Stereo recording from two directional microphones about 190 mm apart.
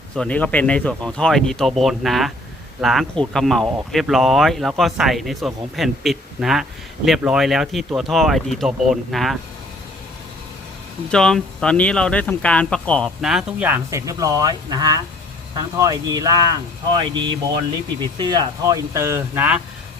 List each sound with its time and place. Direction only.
0.2 s speech: 5° left (ahead or behind)
11.1 s speech: 5° left (ahead or behind)